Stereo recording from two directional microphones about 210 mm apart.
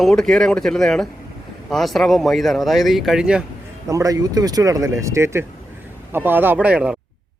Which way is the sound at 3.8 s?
15° right (ahead or behind).